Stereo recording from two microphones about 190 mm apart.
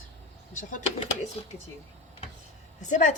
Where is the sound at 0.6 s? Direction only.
40° left (ahead or behind).